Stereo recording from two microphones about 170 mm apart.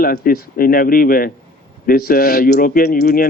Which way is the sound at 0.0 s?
60° left (ahead or behind).